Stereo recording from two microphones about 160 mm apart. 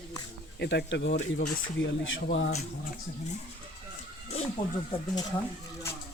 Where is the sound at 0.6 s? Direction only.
90° left.